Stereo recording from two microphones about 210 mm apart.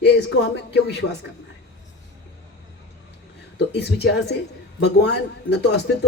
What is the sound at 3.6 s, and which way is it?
A man's voice, 50° left (ahead or behind).